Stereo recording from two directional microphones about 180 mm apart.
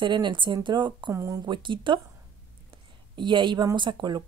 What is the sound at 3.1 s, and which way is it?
A woman's voice, 25° right (ahead or behind).